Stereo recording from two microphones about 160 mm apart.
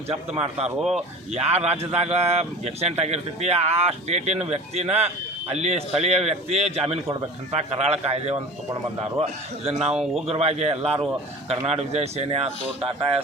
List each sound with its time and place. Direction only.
0.1 s speech: 40° right (ahead or behind)
0.8 s speech: 5° right (ahead or behind)
1.3 s a man's voice: 40° right (ahead or behind)
9.6 s speech: 40° right (ahead or behind)